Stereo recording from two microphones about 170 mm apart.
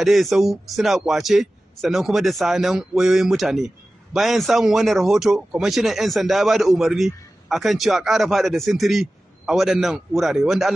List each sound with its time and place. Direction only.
0.0 s speech: centre (ahead or behind)